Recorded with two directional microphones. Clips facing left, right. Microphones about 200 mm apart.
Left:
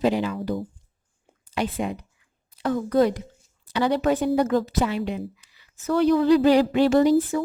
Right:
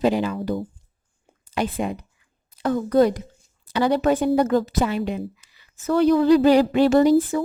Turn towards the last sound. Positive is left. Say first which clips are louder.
# right 2 dB
turn(degrees=-45)  # may be behind; listen again after turning